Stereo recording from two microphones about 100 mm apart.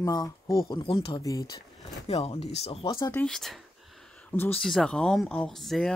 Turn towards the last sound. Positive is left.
turn(degrees=0)  # may be behind; listen again after turning